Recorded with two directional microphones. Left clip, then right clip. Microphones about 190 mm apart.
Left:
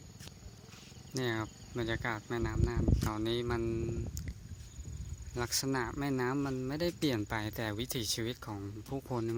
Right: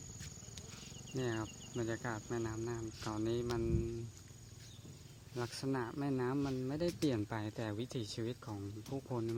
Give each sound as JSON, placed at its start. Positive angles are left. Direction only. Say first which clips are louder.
{"t": 1.1, "sound": "speech", "louder": "left 4 dB", "side_deg": 20}
{"t": 5.3, "sound": "speech", "louder": "left 6 dB", "side_deg": 20}